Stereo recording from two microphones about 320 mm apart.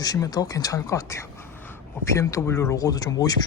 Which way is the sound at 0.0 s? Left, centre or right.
Centre.